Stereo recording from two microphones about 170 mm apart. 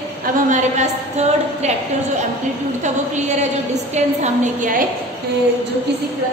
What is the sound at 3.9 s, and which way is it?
Speech, 45° right (ahead or behind).